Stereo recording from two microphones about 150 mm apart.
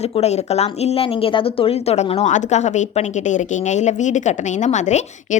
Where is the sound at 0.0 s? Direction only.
45° left (ahead or behind).